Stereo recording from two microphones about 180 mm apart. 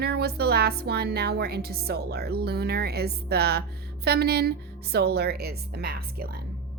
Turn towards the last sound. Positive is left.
turn(degrees=-60)  # may be behind; listen again after turning